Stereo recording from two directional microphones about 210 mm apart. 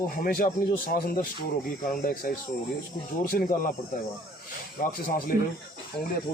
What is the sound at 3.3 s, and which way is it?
Speech, 45° left (ahead or behind).